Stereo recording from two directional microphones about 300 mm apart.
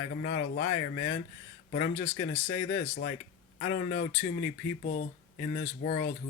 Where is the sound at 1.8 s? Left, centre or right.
Left.